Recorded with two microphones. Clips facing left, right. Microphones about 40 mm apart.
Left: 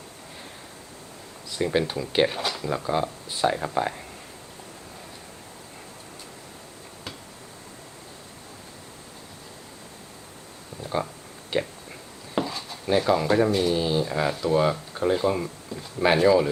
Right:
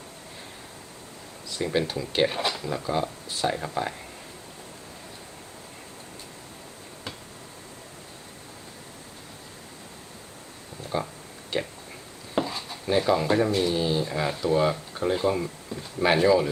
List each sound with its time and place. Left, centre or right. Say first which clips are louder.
1.6 s speech: left 2 dB; centre
2.3 s speech: right 1 dB; centre
2.6 s speech: left 2 dB; centre
10.8 s speech: left 2 dB; centre
12.5 s chopping: even; centre
12.9 s speech: left 1 dB; centre